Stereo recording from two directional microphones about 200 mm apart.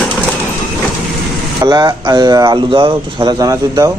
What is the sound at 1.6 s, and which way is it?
A man's voice, 20° right (ahead or behind).